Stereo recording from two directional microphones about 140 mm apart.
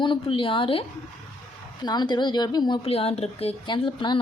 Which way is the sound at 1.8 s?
30° left (ahead or behind).